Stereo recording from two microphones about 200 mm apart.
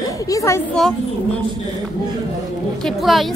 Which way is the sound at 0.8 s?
5° left (ahead or behind).